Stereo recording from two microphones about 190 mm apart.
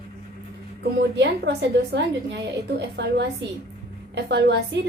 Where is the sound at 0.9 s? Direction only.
65° right (ahead or behind).